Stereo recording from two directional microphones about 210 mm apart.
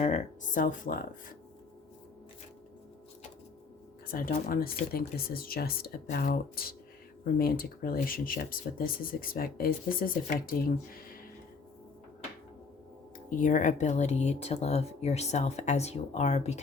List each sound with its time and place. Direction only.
0.0 s speech: 35° left (ahead or behind)
4.1 s speech: 45° left (ahead or behind)
13.3 s speech: 35° left (ahead or behind)